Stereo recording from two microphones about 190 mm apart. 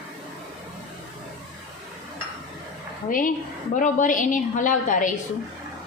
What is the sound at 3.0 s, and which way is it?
A woman's voice, 45° left (ahead or behind).